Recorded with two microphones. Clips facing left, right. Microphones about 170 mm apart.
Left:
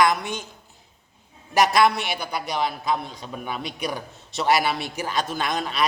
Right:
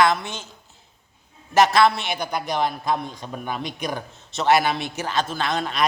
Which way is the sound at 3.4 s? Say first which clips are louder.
Right 2 dB; 5° left (ahead or behind).